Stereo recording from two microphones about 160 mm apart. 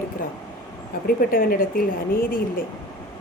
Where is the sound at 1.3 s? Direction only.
65° left (ahead or behind).